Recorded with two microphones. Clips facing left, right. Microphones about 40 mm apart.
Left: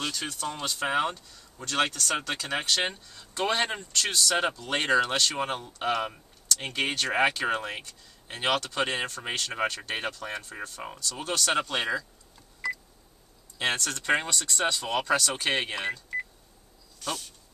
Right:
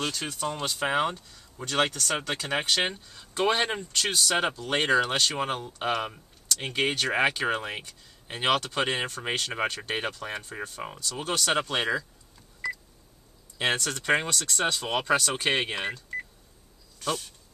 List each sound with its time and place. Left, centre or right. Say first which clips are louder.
0.0 s speech: right 2 dB; centre
13.6 s speech: right 1 dB; centre